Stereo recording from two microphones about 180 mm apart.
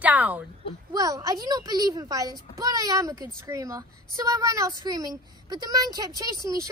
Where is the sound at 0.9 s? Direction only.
20° right (ahead or behind).